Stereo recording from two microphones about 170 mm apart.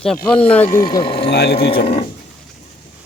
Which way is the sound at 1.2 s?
75° left (ahead or behind).